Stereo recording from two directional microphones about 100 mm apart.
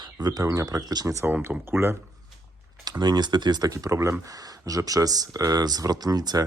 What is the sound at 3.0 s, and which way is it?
Speech, 45° right (ahead or behind).